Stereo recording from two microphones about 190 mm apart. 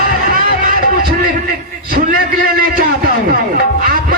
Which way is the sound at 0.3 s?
45° right (ahead or behind).